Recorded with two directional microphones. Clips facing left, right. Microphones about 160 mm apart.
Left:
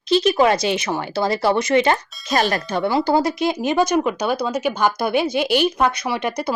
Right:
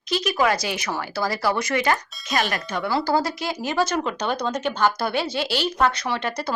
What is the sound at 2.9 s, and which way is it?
A woman's voice, 20° left (ahead or behind).